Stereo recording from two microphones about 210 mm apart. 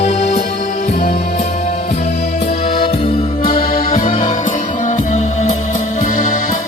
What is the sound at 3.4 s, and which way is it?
Music, 45° left (ahead or behind).